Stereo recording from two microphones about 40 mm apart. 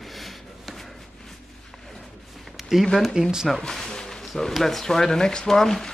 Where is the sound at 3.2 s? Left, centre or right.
Right.